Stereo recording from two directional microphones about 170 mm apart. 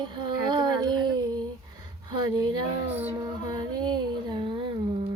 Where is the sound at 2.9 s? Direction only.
10° right (ahead or behind).